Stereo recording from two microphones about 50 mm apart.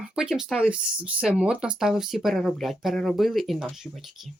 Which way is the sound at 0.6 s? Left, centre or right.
Centre.